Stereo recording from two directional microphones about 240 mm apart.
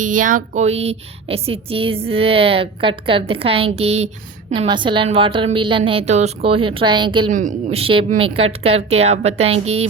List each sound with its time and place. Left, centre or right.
0.0 s a woman's voice: right
7.3 s a woman's voice: right